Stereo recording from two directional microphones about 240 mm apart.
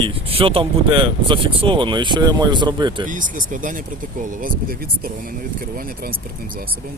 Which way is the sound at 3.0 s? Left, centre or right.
Right.